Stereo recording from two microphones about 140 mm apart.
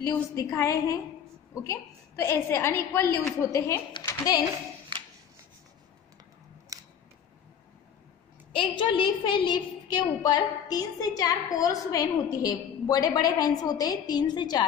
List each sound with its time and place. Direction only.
0.0 s a woman's voice: 25° left (ahead or behind)
4.9 s a sound: 35° right (ahead or behind)
6.7 s camera: 25° right (ahead or behind)
8.5 s a woman's voice: 35° left (ahead or behind)